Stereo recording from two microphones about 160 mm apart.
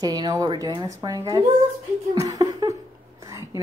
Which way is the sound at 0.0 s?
25° right (ahead or behind).